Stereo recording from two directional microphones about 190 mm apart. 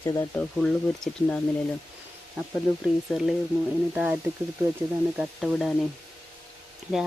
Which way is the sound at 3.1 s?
Centre (ahead or behind).